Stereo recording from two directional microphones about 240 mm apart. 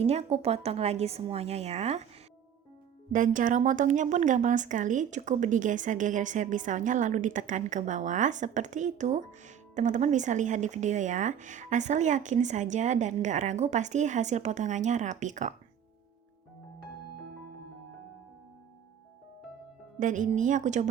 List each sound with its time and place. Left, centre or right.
0.0 s speech: right
3.1 s a woman's voice: right
20.0 s a woman's voice: right